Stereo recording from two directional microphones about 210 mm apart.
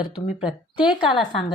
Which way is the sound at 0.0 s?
20° left (ahead or behind).